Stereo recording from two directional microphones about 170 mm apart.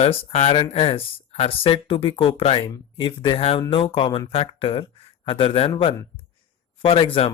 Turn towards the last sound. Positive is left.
turn(degrees=35)  # may be behind; listen again after turning